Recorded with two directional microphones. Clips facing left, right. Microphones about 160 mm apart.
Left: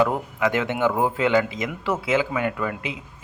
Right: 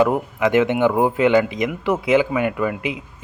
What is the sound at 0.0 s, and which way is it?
Speech, 20° right (ahead or behind).